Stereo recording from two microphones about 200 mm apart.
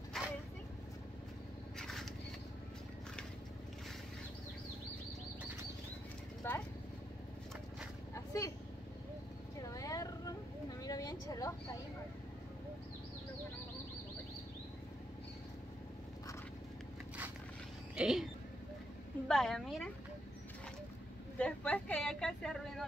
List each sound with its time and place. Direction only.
0.2 s vehicle: centre (ahead or behind)
1.8 s rodents: centre (ahead or behind)
6.4 s clip-clop: 10° left (ahead or behind)
8.1 s vehicle: 15° left (ahead or behind)
9.6 s vehicle: 15° left (ahead or behind)
10.8 s a sound: 20° left (ahead or behind)
17.9 s a sound: centre (ahead or behind)
19.2 s a sound: centre (ahead or behind)
21.4 s vehicle: 5° left (ahead or behind)